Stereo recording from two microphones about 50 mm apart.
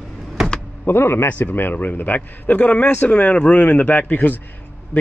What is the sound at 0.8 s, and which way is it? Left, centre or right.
Speech, left.